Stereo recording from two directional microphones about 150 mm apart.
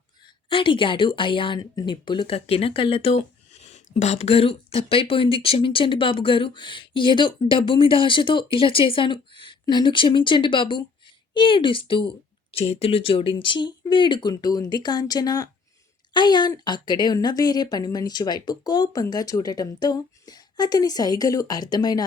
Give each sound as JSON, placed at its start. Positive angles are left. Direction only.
{"t": 0.5, "sound": "speech", "side_deg": 35}